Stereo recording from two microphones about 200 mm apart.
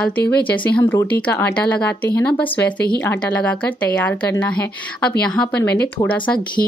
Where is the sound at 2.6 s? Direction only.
50° left (ahead or behind).